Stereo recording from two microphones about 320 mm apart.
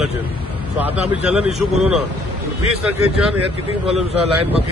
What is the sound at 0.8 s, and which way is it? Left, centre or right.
A man's voice, centre.